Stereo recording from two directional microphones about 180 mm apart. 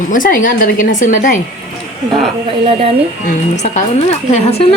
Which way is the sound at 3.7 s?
35° left (ahead or behind).